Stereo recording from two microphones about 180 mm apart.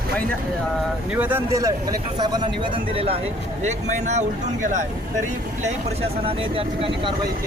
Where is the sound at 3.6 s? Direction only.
40° right (ahead or behind).